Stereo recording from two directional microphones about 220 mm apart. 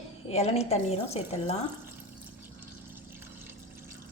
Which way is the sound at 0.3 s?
30° left (ahead or behind).